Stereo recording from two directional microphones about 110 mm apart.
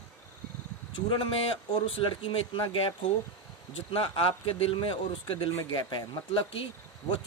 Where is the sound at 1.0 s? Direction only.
50° left (ahead or behind).